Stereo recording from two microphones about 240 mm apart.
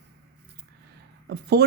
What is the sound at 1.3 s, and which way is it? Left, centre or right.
Speech, right.